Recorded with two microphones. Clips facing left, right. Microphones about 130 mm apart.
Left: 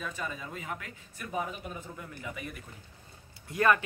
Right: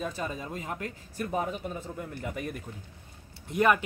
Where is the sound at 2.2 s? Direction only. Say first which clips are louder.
Right 5 dB; 45° right (ahead or behind).